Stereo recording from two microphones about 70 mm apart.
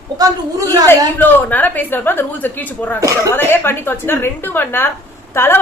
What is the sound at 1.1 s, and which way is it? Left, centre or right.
A woman's voice, left.